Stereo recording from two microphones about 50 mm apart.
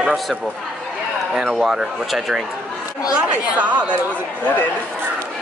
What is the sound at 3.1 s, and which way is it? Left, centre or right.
Speech, right.